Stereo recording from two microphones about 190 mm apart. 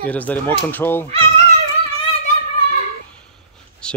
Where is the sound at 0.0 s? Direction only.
10° left (ahead or behind).